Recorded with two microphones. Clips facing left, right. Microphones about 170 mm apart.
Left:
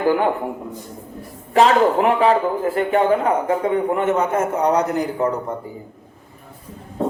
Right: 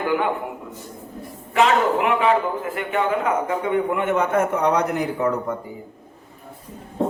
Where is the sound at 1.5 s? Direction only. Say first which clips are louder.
Left 4 dB; 35° left (ahead or behind).